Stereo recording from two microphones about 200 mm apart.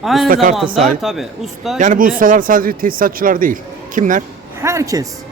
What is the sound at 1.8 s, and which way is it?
Speech, 40° right (ahead or behind).